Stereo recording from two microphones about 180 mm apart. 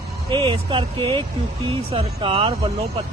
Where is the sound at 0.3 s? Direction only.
25° right (ahead or behind).